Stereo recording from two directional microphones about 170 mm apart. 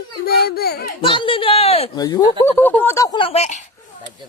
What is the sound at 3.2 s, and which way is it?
Speech, 35° left (ahead or behind).